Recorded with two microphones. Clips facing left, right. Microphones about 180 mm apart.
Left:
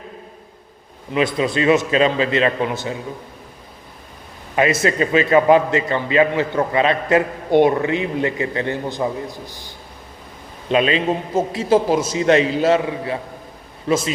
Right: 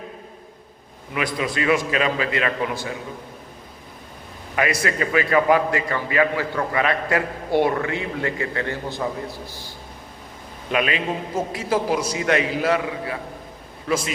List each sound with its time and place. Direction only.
1.1 s a man's voice: 25° left (ahead or behind)
4.5 s a man's voice: 25° left (ahead or behind)
10.7 s a man's voice: 25° left (ahead or behind)